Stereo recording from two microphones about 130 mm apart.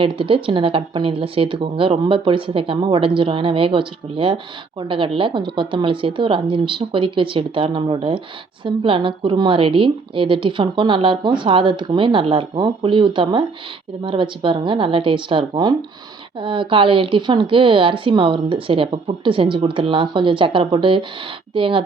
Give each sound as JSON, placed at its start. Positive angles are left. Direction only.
{"t": 0.0, "sound": "a woman's voice", "side_deg": -45}